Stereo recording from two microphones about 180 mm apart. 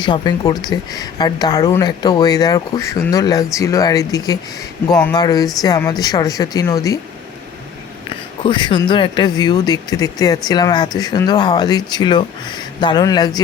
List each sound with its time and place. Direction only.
0.0 s speech: 25° left (ahead or behind)
8.4 s speech: 25° left (ahead or behind)